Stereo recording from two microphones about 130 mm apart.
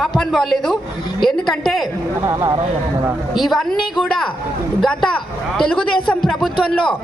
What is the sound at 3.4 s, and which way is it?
Speech, centre (ahead or behind).